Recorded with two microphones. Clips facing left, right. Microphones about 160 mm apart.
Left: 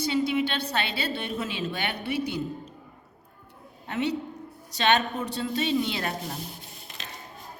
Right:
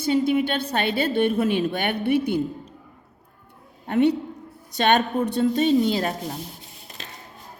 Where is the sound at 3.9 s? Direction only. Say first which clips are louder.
Right 8 dB; 55° right (ahead or behind).